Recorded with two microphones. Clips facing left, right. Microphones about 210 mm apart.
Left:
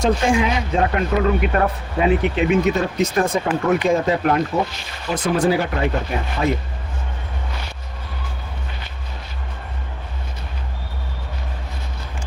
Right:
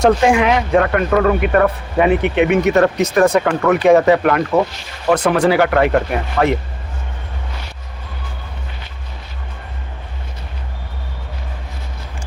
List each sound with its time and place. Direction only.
0.0 s speech: 70° right (ahead or behind)